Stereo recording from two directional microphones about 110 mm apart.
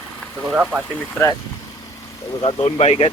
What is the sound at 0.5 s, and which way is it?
Speech, 15° right (ahead or behind).